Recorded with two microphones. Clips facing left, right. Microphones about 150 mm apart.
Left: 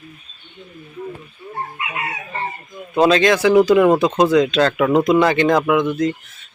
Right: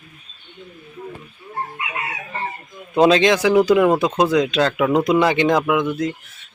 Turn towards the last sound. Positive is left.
turn(degrees=-10)  # may be behind; listen again after turning